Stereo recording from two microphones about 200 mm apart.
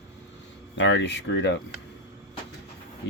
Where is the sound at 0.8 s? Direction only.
65° left (ahead or behind).